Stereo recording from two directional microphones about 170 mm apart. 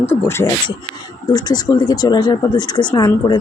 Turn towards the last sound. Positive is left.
turn(degrees=25)  # may be behind; listen again after turning